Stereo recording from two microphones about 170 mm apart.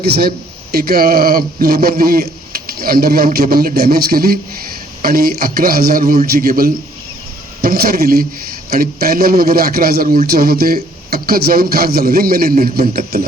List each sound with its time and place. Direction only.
0.0 s speech: 65° right (ahead or behind)